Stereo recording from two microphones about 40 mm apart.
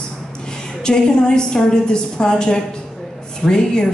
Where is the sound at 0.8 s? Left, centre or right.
Left.